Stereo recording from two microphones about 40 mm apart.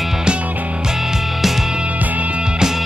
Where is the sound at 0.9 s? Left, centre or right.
Centre.